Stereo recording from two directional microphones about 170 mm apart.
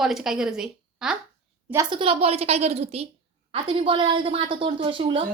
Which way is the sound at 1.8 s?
30° right (ahead or behind).